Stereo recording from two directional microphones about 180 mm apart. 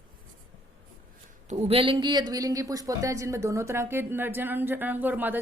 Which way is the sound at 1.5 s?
35° right (ahead or behind).